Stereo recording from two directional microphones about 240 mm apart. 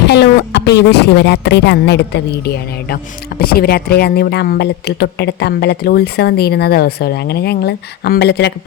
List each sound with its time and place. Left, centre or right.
0.1 s speech: left